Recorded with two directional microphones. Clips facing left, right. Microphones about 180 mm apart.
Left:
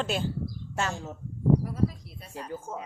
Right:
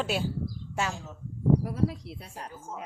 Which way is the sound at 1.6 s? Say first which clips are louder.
Even; 70° right (ahead or behind).